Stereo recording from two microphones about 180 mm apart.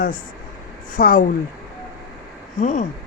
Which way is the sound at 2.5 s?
45° left (ahead or behind).